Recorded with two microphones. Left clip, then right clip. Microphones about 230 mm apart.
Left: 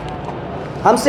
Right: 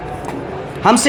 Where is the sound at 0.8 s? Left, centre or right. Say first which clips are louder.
Even; right.